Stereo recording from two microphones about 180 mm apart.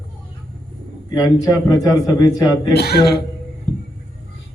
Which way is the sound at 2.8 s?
60° left (ahead or behind).